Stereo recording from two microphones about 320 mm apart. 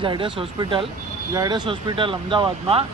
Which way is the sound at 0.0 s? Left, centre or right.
Centre.